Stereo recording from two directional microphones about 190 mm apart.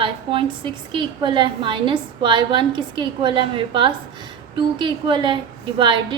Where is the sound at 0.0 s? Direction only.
25° right (ahead or behind).